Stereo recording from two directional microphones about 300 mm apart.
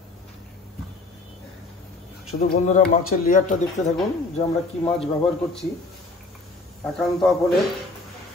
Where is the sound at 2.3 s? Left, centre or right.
Left.